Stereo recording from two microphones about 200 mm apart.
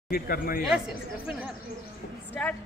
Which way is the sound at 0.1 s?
50° left (ahead or behind).